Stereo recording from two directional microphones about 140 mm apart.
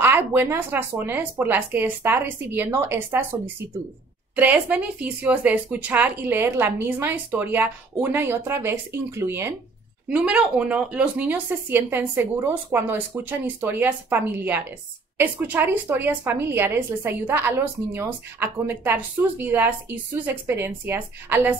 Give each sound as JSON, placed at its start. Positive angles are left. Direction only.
{"t": 0.0, "sound": "speech", "side_deg": -15}
{"t": 4.4, "sound": "speech", "side_deg": -10}